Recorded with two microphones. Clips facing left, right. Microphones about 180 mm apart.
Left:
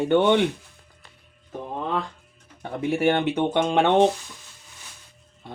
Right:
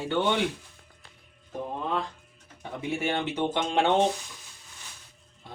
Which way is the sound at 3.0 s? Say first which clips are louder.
Left 7 dB; 60° left (ahead or behind).